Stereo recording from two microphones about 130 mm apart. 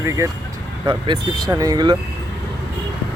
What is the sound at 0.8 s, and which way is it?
A man's voice, 35° right (ahead or behind).